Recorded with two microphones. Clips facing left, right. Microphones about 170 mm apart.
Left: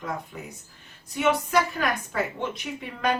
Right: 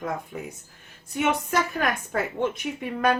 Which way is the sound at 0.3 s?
50° right (ahead or behind).